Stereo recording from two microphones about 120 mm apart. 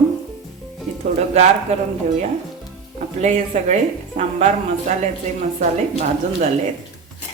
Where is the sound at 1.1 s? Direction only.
65° right (ahead or behind).